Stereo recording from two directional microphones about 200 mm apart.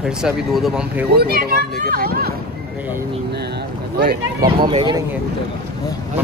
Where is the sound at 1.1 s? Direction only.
50° right (ahead or behind).